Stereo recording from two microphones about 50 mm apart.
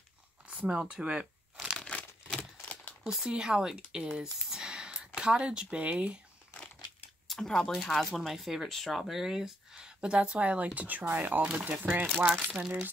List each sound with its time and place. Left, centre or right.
0.5 s a sound: right
0.7 s crumpling: centre
1.8 s crumpling: left
3.3 s speech: centre
7.2 s speech: centre
7.8 s speech: centre; by 12.6 s right